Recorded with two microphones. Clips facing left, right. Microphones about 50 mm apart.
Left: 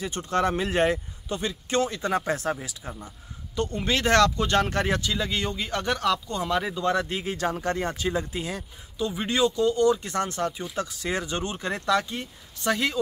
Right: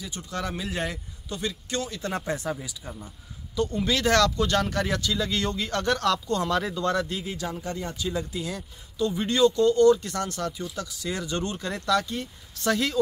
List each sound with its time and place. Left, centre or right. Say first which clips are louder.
0.0 s speech: left 8 dB; left
2.2 s speech: left 3 dB; left
3.5 s speech: right 1 dB; left; by 7.1 s centre
7.1 s speech: left 4 dB; left
8.1 s speech: left 2 dB; left
8.9 s speech: right 1 dB; centre
9.9 s speech: left 3 dB; left